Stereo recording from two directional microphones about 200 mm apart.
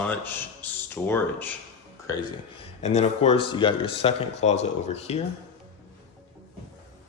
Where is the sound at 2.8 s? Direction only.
35° left (ahead or behind).